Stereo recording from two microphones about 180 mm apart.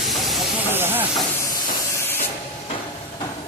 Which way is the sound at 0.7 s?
10° right (ahead or behind).